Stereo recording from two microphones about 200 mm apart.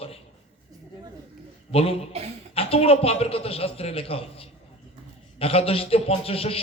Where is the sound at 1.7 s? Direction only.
30° left (ahead or behind).